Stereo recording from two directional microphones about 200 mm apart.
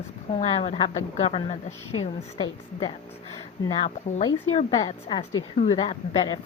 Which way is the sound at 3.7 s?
30° left (ahead or behind).